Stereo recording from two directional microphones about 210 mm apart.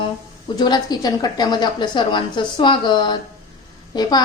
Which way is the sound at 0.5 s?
20° left (ahead or behind).